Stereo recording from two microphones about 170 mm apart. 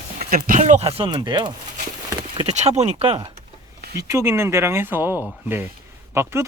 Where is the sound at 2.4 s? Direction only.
40° right (ahead or behind).